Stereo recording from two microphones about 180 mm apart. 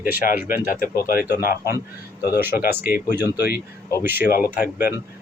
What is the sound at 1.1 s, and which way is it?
Speech, 55° left (ahead or behind).